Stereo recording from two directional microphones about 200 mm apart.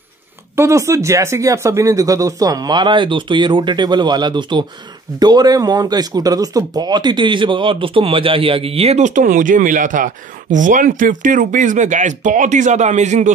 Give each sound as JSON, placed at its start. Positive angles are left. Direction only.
{"t": 0.6, "sound": "speech", "side_deg": -15}